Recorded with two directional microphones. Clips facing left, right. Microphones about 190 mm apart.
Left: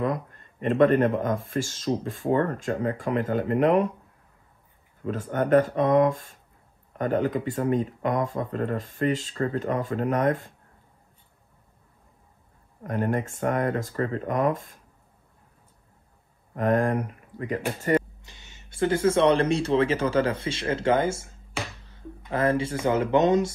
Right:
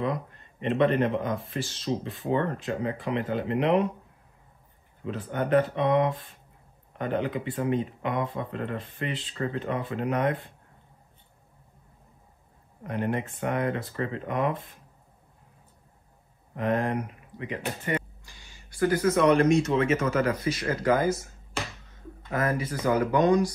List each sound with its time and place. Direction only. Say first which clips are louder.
0.0 s speech: left 2 dB; 45° left (ahead or behind)
5.0 s speech: left 3 dB; 45° left (ahead or behind)
12.8 s speech: left 3 dB; 45° left (ahead or behind)
16.5 s speech: left 4 dB; 45° left (ahead or behind)
18.2 s speech: left 1 dB; 20° left (ahead or behind)